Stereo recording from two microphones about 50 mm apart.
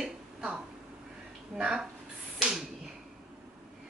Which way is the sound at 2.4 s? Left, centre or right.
Centre.